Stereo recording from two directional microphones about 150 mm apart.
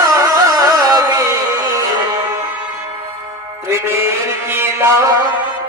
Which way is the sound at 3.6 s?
15° right (ahead or behind).